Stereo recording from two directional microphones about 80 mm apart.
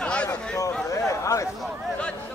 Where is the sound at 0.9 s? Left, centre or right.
Left.